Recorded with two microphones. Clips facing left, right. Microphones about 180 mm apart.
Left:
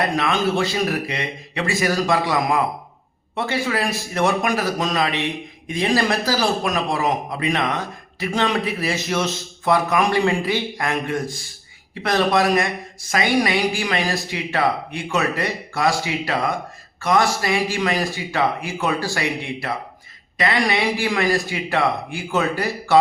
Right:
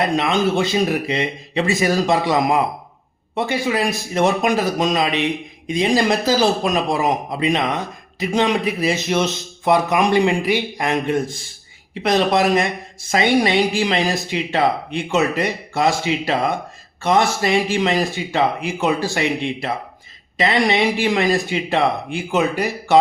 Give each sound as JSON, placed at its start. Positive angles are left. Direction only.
{"t": 0.0, "sound": "a man's voice", "side_deg": -20}